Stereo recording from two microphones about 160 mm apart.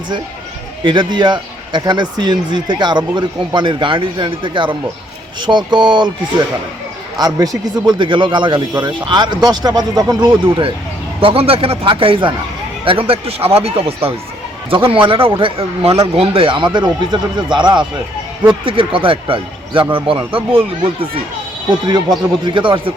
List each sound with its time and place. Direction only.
0.9 s speech: 30° right (ahead or behind)
7.2 s speech: 25° right (ahead or behind)